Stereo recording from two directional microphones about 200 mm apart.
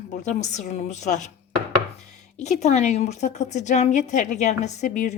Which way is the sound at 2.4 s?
35° left (ahead or behind).